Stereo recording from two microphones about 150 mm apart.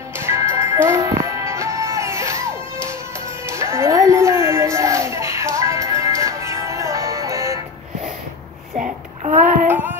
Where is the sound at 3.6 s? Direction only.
20° right (ahead or behind).